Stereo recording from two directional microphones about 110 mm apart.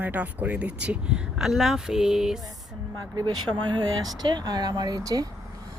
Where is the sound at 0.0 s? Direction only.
15° right (ahead or behind).